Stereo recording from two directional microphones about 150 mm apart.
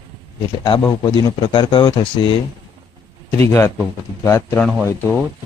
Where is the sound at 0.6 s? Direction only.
30° left (ahead or behind).